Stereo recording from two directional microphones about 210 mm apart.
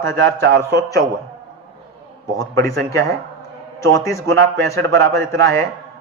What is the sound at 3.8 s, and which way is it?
A man's voice, 15° left (ahead or behind).